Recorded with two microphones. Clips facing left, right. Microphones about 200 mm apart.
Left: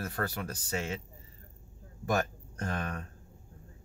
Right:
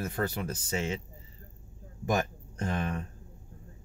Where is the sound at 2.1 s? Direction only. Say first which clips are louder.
Right 1 dB; 15° right (ahead or behind).